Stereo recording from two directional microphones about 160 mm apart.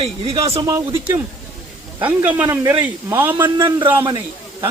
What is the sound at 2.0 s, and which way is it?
Speech, 10° right (ahead or behind).